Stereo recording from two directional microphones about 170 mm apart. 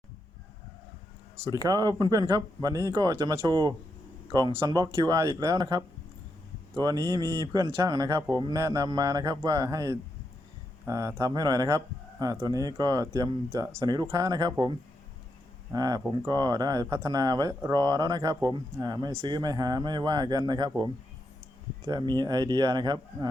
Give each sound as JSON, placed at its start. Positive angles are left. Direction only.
{"t": 1.5, "sound": "speech", "side_deg": -20}
{"t": 15.7, "sound": "speech", "side_deg": -20}